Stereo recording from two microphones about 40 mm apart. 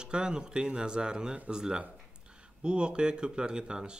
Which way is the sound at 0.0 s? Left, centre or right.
Right.